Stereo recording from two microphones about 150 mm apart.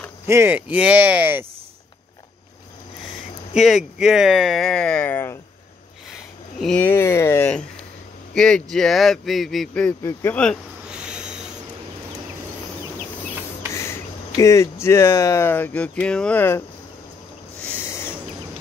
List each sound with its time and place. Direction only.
0.3 s speech: 15° right (ahead or behind)
3.5 s speech: 5° right (ahead or behind); by 7.5 s 15° left (ahead or behind)
8.4 s speech: 5° left (ahead or behind)
10.9 s a sound: 5° right (ahead or behind)
13.7 s speech: 20° left (ahead or behind)
17.6 s owl: 15° left (ahead or behind)